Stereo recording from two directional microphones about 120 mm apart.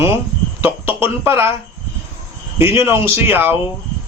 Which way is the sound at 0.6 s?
20° right (ahead or behind).